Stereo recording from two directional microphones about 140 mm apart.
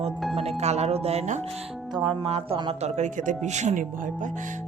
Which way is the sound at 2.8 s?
60° right (ahead or behind).